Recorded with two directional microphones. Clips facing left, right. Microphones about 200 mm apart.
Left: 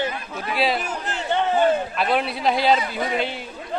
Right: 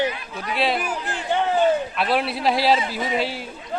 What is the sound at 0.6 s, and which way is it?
Speech, centre (ahead or behind).